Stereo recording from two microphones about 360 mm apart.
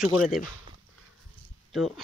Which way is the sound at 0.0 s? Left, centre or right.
Centre.